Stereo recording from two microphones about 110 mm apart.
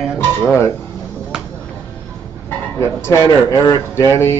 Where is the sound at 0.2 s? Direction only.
20° left (ahead or behind).